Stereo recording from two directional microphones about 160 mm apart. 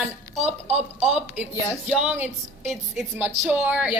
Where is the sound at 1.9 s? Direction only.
10° right (ahead or behind).